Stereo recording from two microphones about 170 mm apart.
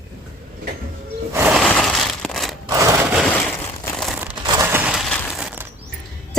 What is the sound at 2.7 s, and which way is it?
Sewing machine, 15° right (ahead or behind).